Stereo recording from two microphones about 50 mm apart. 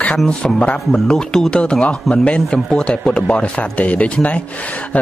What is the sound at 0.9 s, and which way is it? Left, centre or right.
Speech, centre.